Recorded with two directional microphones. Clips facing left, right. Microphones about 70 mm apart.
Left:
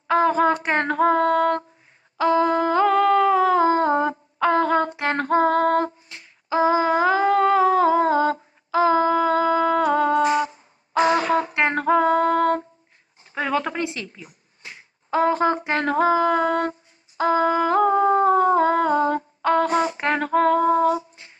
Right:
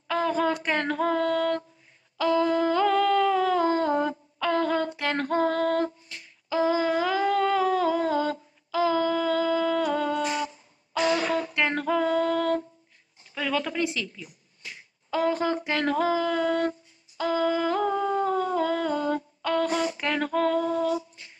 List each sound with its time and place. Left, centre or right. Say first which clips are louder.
0.1 s female singing: left 7 dB; left
2.1 s humming: left 4 dB; left
13.2 s finger snapping: left 5 dB; left
17.2 s humming: left 6 dB; left